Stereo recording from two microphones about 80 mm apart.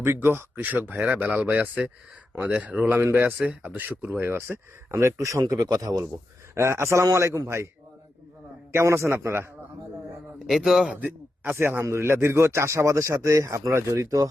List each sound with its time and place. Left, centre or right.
0.0 s speech: right
6.5 s speech: right
8.7 s speech: right
10.4 s a man's voice: centre
11.4 s speech: right